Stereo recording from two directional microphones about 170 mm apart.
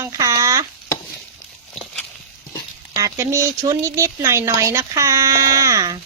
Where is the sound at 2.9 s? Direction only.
20° right (ahead or behind).